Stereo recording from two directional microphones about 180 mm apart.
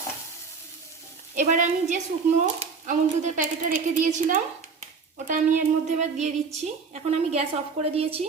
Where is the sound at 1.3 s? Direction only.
45° right (ahead or behind).